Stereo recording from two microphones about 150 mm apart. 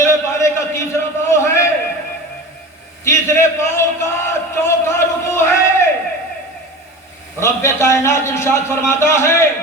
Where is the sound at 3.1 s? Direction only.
20° left (ahead or behind).